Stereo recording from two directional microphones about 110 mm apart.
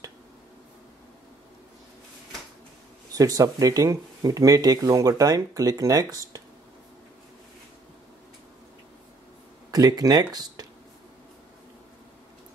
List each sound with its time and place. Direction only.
3.2 s speech: 35° right (ahead or behind)
9.7 s speech: 35° right (ahead or behind)